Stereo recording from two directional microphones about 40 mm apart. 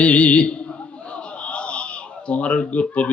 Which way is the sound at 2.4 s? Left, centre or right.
Left.